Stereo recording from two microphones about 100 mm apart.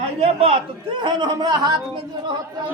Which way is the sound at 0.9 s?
50° right (ahead or behind).